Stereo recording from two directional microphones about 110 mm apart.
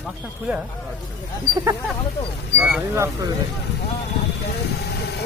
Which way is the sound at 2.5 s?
15° right (ahead or behind).